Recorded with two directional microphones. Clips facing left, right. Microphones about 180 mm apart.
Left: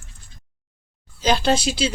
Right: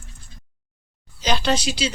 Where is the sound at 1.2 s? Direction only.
50° left (ahead or behind).